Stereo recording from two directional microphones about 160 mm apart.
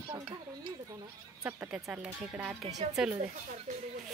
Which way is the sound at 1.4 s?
5° right (ahead or behind).